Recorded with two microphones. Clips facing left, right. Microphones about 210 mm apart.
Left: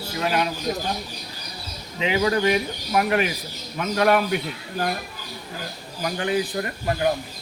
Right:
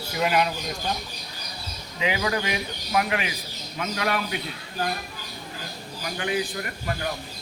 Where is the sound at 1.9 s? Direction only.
30° left (ahead or behind).